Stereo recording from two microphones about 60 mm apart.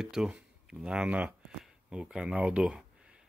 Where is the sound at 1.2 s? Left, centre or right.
Centre.